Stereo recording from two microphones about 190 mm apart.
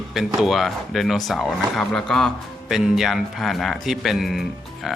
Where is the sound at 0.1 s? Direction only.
Centre (ahead or behind).